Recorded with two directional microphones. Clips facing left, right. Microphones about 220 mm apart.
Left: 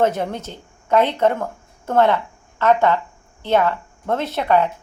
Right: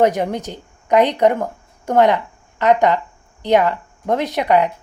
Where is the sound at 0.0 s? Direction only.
15° right (ahead or behind).